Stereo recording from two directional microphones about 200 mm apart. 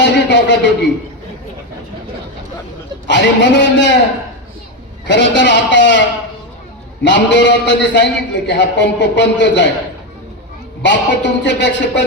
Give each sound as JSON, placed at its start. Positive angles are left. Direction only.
{"t": 0.0, "sound": "a sound", "side_deg": 60}
{"t": 3.1, "sound": "a man's voice", "side_deg": 60}
{"t": 5.0, "sound": "a man's voice", "side_deg": 60}
{"t": 10.8, "sound": "a man's voice", "side_deg": 60}